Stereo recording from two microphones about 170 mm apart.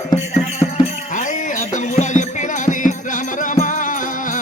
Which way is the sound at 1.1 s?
50° left (ahead or behind).